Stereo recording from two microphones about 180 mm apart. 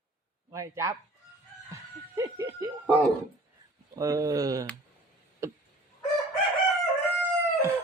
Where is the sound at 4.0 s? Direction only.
20° right (ahead or behind).